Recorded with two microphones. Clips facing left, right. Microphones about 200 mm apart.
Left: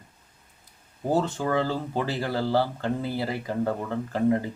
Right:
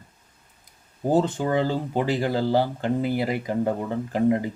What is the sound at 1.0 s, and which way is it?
Speech, 20° right (ahead or behind).